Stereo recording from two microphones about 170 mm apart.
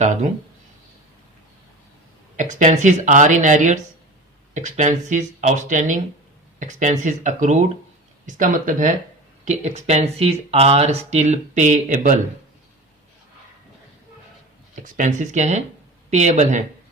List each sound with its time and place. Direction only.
2.3 s speech: 45° right (ahead or behind)
14.8 s speech: 50° right (ahead or behind)